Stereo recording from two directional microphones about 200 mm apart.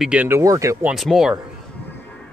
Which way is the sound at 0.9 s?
Centre (ahead or behind).